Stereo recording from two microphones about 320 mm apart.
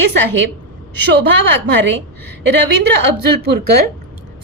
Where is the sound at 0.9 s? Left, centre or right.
Right.